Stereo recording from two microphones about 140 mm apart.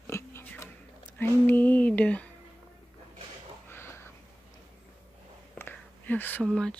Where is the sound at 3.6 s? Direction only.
15° left (ahead or behind).